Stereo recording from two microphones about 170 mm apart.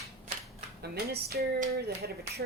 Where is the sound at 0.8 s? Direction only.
70° right (ahead or behind).